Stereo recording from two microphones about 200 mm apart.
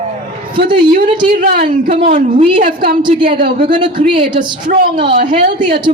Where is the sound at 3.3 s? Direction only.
50° right (ahead or behind).